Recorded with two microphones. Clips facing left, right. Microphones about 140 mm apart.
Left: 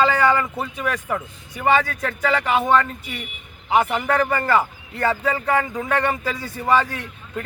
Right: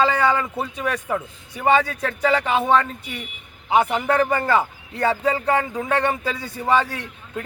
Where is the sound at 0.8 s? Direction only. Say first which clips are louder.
Even; 30° right (ahead or behind).